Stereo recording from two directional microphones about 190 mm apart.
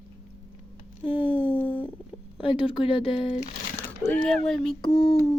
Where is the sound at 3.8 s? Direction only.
10° left (ahead or behind).